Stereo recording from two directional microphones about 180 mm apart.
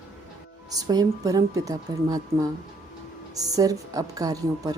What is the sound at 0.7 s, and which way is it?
Speech, 20° right (ahead or behind).